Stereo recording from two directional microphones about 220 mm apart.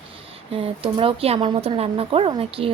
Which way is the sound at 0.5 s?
25° right (ahead or behind).